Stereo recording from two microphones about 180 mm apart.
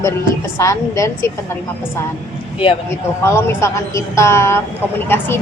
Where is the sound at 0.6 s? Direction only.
15° left (ahead or behind).